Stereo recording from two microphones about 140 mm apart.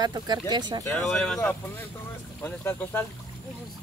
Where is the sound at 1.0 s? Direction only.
5° left (ahead or behind).